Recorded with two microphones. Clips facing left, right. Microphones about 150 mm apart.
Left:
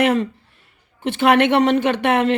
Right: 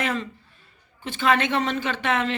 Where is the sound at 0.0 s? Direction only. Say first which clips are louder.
Left 10 dB; 65° left (ahead or behind).